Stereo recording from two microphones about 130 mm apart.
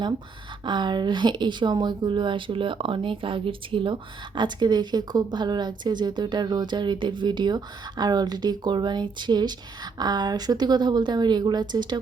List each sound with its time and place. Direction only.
0.6 s speech: 35° right (ahead or behind)